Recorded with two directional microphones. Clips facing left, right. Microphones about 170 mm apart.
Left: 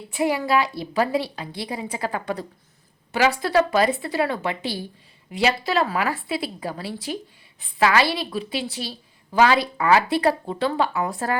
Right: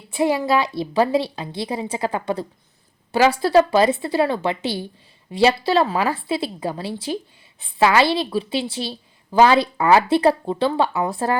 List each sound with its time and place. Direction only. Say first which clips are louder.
0.2 s a woman's voice: right 2 dB; 25° right (ahead or behind)